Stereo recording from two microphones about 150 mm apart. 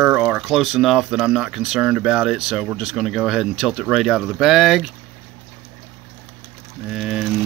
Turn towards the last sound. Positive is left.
turn(degrees=0)  # may be behind; listen again after turning